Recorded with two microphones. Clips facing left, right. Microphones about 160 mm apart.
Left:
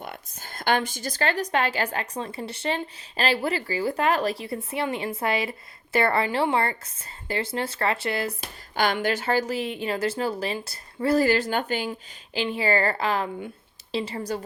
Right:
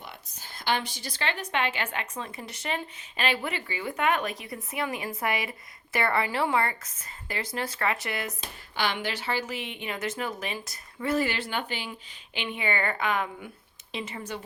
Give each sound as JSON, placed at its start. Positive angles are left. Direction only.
{"t": 0.0, "sound": "speech", "side_deg": 50}
{"t": 8.7, "sound": "speech", "side_deg": 45}